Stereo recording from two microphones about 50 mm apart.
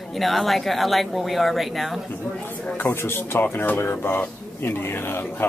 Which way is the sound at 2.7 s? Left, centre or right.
Left.